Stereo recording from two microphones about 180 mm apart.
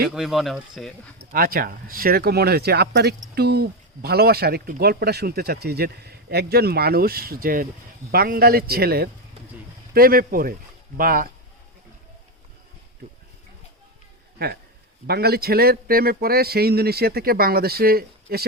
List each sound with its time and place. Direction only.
0.1 s speech: centre (ahead or behind)
1.2 s speech: 55° right (ahead or behind)
14.3 s speech: 60° right (ahead or behind)